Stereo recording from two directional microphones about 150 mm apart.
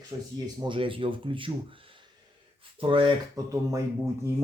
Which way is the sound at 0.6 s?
35° right (ahead or behind).